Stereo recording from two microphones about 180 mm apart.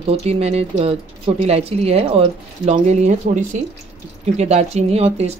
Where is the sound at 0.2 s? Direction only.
35° right (ahead or behind).